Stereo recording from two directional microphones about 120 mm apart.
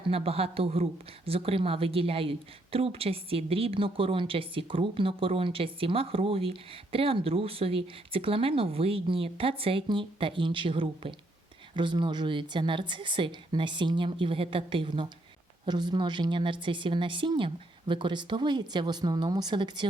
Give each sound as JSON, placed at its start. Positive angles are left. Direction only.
{"t": 0.0, "sound": "a woman's voice", "side_deg": -55}